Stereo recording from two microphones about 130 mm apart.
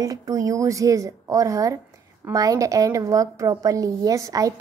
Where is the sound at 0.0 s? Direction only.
25° right (ahead or behind).